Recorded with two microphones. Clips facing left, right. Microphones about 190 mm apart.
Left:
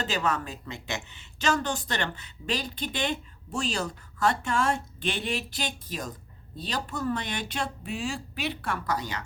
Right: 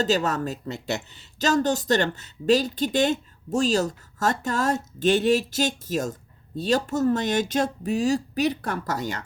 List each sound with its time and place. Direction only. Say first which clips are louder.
0.0 s speech: right 6 dB; 40° right (ahead or behind)